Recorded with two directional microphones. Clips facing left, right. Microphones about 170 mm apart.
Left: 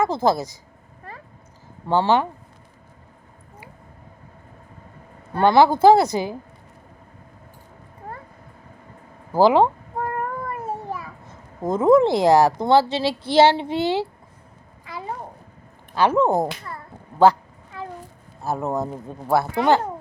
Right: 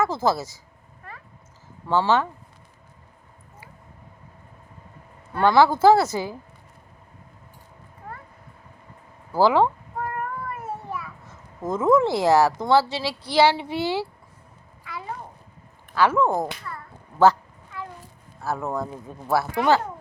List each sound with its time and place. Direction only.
0.0 s a woman's voice: 15° left (ahead or behind)
1.9 s a woman's voice: 15° left (ahead or behind)
5.4 s a woman's voice: 20° left (ahead or behind)
8.0 s vehicle: 40° left (ahead or behind)
9.3 s a woman's voice: 20° left (ahead or behind)
10.0 s child singing: 35° left (ahead or behind)
11.3 s a sound: 15° left (ahead or behind)
11.9 s a woman's voice: 20° left (ahead or behind)
16.0 s a woman's voice: 20° left (ahead or behind)
18.4 s a woman's voice: 20° left (ahead or behind)